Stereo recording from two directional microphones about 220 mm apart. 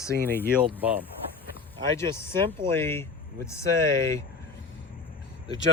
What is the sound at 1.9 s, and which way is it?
Speech, 10° left (ahead or behind).